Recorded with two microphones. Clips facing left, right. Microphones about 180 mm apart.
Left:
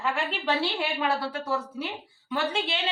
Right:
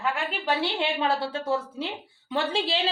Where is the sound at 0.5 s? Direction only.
25° right (ahead or behind).